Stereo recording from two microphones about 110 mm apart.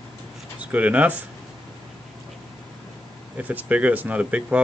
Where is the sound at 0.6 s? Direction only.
15° right (ahead or behind).